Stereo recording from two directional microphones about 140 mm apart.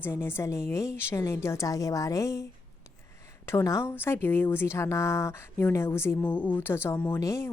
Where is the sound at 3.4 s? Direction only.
20° left (ahead or behind).